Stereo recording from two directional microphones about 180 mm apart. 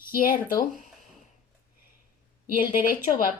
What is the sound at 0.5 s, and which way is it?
Speech, 50° left (ahead or behind).